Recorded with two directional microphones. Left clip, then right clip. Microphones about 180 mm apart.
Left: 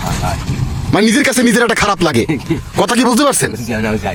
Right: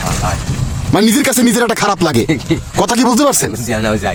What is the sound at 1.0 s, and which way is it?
Speech, 15° right (ahead or behind).